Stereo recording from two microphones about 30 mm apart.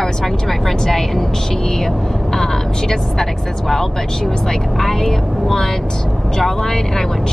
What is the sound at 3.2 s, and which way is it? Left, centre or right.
Speech, centre.